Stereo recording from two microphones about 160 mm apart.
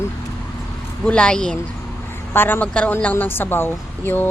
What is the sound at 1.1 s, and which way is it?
A woman's voice, 5° left (ahead or behind).